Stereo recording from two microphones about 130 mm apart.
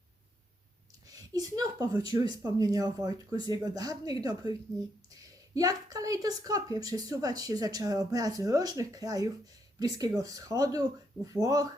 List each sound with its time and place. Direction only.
1.0 s speech: 30° right (ahead or behind)